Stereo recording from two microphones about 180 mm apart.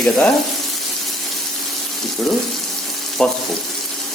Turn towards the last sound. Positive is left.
turn(degrees=0)  # may be behind; listen again after turning